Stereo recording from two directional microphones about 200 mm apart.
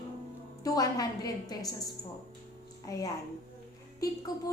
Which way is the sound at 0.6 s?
15° left (ahead or behind).